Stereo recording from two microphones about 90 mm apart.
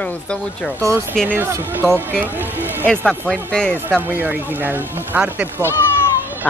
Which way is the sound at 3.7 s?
25° right (ahead or behind).